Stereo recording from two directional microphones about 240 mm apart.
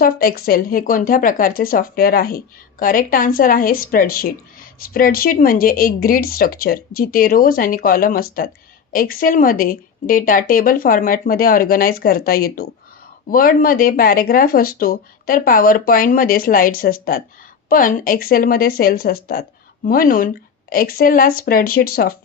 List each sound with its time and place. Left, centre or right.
0.0 s speech: left